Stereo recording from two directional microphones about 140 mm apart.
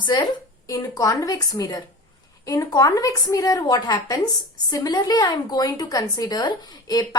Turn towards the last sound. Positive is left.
turn(degrees=30)  # may be behind; listen again after turning